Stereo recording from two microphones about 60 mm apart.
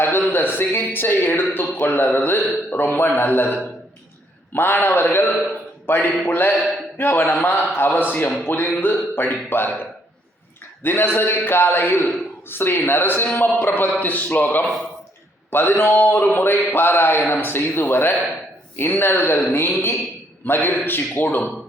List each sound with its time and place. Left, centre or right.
0.0 s a sound: left
1.7 s a man's voice: left
5.5 s a sound: left
6.2 s a man's voice: left
10.8 s a man's voice: left
15.4 s a man's voice: left